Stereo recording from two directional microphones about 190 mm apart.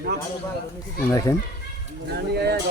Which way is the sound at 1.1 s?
15° left (ahead or behind).